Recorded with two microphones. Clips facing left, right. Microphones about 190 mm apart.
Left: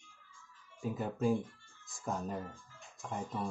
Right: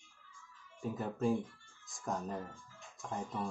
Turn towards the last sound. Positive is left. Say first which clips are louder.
# left 1 dB
turn(degrees=0)  # may be behind; listen again after turning